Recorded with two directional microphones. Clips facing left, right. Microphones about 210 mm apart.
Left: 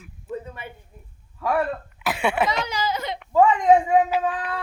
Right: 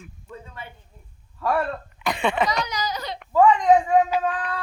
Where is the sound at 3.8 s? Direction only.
10° left (ahead or behind).